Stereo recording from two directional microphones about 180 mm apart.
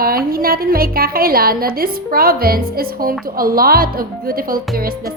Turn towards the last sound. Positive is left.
turn(degrees=-55)  # may be behind; listen again after turning